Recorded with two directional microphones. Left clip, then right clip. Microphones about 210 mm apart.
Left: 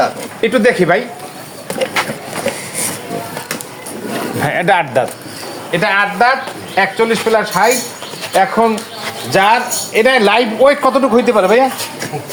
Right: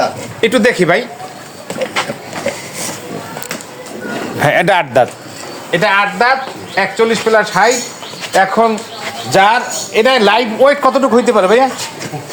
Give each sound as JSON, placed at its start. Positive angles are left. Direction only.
{"t": 0.4, "sound": "speech", "side_deg": -50}
{"t": 4.4, "sound": "speech", "side_deg": -50}
{"t": 5.7, "sound": "a man's voice", "side_deg": -40}
{"t": 9.3, "sound": "a man's voice", "side_deg": -25}